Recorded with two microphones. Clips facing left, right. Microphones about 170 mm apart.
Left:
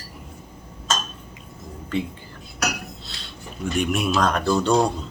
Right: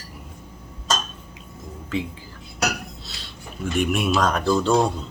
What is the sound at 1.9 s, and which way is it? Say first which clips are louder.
Speech: left 1 dB; centre (ahead or behind).